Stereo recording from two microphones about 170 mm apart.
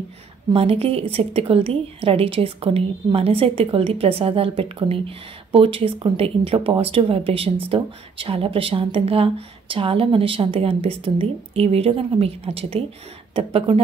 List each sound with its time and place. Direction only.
0.5 s a woman's voice: 35° right (ahead or behind)